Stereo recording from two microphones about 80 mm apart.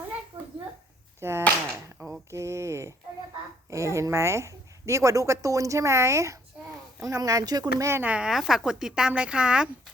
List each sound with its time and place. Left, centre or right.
1.2 s a woman's voice: right
2.0 s mantra: right
2.3 s a sound: right
3.7 s a woman's voice: right
8.0 s speech: centre